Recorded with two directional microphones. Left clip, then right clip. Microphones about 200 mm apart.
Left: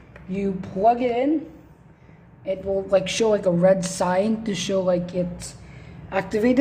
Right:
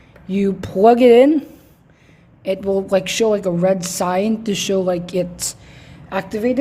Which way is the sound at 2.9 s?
20° right (ahead or behind).